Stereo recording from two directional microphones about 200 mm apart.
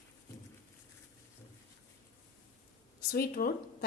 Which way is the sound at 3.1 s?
45° left (ahead or behind).